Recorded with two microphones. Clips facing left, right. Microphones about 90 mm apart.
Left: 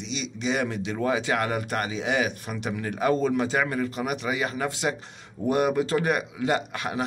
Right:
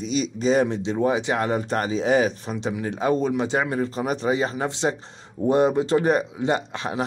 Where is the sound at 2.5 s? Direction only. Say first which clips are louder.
Right 3 dB; 25° right (ahead or behind).